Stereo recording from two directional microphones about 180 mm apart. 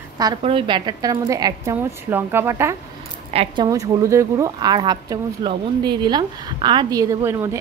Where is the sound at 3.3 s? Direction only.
30° right (ahead or behind).